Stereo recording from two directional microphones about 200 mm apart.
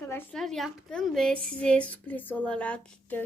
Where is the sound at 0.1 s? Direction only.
5° left (ahead or behind).